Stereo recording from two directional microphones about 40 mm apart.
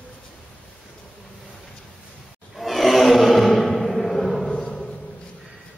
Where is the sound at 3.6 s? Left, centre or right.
Centre.